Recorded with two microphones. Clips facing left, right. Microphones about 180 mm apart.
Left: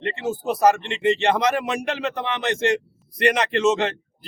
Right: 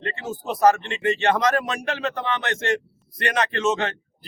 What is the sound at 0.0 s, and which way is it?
A man's voice, 10° left (ahead or behind).